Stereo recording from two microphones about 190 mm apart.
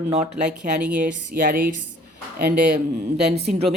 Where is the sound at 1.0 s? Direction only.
45° right (ahead or behind).